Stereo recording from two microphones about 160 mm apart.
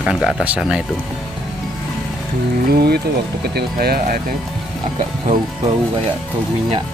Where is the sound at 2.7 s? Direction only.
75° right (ahead or behind).